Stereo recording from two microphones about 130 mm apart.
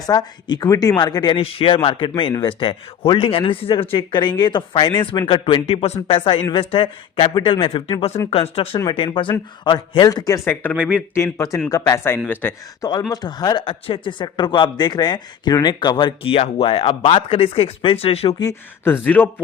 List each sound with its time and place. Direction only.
0.0 s speech: 30° left (ahead or behind)
1.4 s speech: 45° left (ahead or behind)
9.6 s speech: 35° left (ahead or behind)
10.4 s speech: 15° left (ahead or behind)
11.1 s a man's voice: 20° left (ahead or behind)
12.8 s speech: 30° left (ahead or behind); by 18.3 s 50° left (ahead or behind)
19.0 s speech: 10° left (ahead or behind)